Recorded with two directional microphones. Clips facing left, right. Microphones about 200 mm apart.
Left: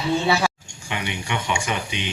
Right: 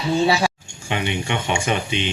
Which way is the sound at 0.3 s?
30° right (ahead or behind).